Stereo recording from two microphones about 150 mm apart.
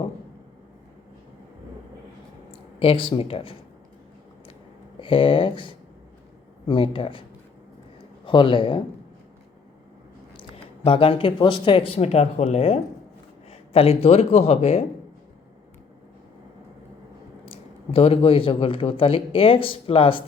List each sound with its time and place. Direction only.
2.7 s speech: 35° left (ahead or behind)
4.9 s a man's voice: 35° left (ahead or behind)
10.8 s speech: 35° left (ahead or behind)
17.4 s speech: 40° left (ahead or behind)